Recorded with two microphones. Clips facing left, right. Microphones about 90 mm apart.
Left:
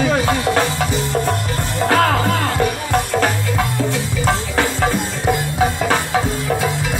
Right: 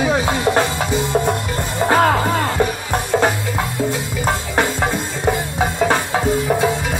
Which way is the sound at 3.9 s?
20° right (ahead or behind).